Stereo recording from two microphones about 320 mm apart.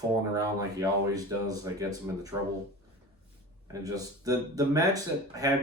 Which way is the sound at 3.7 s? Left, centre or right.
Centre.